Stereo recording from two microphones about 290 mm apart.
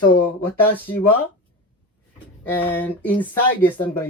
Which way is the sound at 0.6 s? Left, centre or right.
Centre.